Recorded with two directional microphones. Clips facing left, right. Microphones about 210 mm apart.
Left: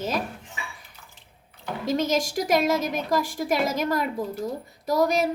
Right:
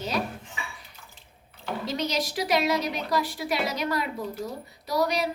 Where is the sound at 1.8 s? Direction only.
50° left (ahead or behind).